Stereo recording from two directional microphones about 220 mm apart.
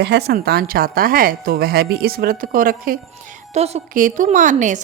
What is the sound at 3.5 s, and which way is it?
A woman's voice, 30° right (ahead or behind).